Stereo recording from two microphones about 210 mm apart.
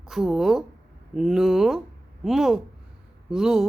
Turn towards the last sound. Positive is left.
turn(degrees=-5)  # may be behind; listen again after turning